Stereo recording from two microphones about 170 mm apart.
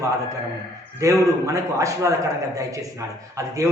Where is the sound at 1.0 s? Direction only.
15° right (ahead or behind).